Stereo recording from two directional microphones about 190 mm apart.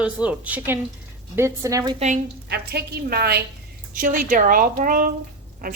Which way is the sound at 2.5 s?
55° right (ahead or behind).